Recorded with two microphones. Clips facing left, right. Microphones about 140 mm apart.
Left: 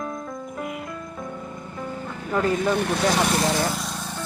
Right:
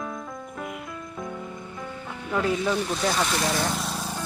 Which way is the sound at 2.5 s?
55° left (ahead or behind).